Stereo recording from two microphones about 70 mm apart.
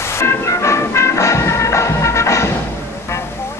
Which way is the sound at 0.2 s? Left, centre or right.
Left.